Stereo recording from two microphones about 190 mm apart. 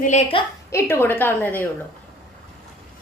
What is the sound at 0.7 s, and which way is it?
A woman's voice, 15° left (ahead or behind).